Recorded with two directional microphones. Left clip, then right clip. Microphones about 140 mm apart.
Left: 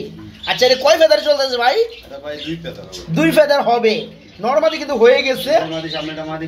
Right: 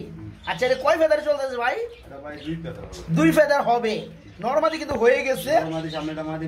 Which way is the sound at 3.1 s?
20° left (ahead or behind).